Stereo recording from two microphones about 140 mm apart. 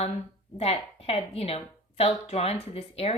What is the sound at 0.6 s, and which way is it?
Speech, 45° left (ahead or behind).